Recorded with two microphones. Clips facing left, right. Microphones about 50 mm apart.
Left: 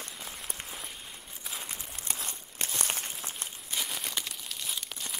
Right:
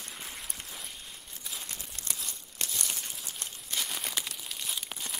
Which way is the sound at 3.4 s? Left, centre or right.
Centre.